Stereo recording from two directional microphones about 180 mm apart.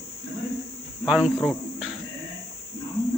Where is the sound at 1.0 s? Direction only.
5° right (ahead or behind).